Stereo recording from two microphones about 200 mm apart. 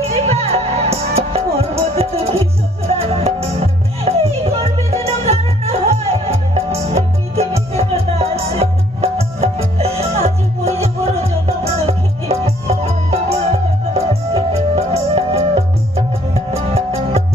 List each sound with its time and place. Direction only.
0.0 s music: 30° right (ahead or behind)
16.7 s music: 30° right (ahead or behind)